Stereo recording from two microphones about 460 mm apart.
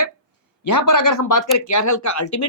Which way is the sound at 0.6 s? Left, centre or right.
Left.